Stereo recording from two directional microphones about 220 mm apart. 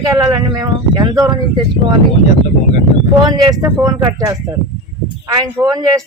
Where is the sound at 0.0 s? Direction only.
15° right (ahead or behind).